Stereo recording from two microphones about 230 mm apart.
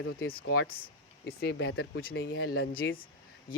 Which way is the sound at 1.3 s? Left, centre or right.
Left.